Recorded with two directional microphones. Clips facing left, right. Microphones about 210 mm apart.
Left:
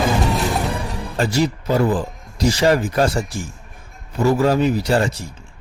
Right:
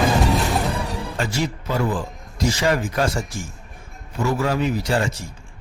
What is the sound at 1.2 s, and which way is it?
Speech, 40° left (ahead or behind).